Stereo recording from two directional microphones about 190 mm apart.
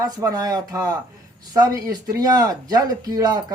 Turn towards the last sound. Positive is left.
turn(degrees=-20)  # may be behind; listen again after turning